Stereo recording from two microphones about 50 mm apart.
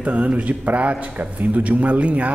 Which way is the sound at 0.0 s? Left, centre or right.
Right.